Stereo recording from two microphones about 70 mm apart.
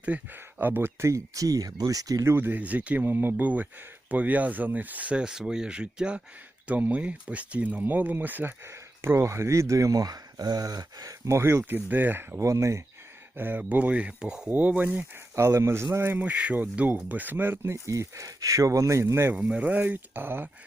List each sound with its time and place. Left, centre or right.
0.0 s speech: right
2.2 s a man's voice: right
2.6 s speech: right
8.6 s speech: right
11.3 s a man's voice: right
11.6 s speech: right
12.4 s speech: right
13.3 s speech: right
15.4 s a man's voice: right
16.1 s speech: right
17.8 s speech: right
19.3 s speech: centre